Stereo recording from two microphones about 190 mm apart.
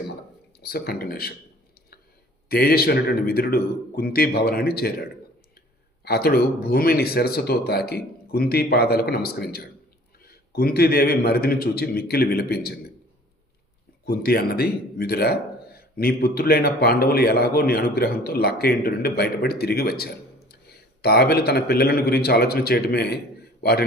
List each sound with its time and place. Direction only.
0.6 s speech: 55° left (ahead or behind)
2.5 s a man's voice: 55° left (ahead or behind)
6.1 s a man's voice: 55° left (ahead or behind)
14.0 s a man's voice: 55° left (ahead or behind)